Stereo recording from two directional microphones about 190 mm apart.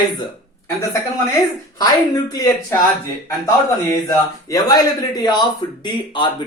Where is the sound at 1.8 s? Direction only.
20° left (ahead or behind).